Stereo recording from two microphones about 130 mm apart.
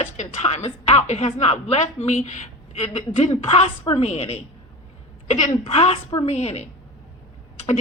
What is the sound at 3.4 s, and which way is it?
Speech, 55° left (ahead or behind).